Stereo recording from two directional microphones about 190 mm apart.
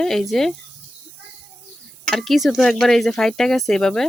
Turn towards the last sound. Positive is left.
turn(degrees=0)  # may be behind; listen again after turning